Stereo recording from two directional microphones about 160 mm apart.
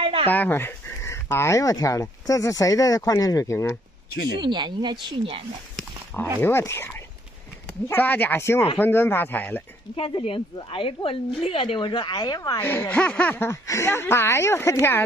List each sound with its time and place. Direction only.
0.0 s dog: 35° right (ahead or behind)
0.3 s speech: 10° left (ahead or behind)
4.4 s speech: 30° right (ahead or behind)
6.4 s speech: 15° left (ahead or behind)
9.9 s a woman's voice: 35° left (ahead or behind)
12.5 s speech: 10° left (ahead or behind)